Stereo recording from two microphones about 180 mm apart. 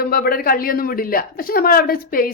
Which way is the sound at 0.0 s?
55° left (ahead or behind).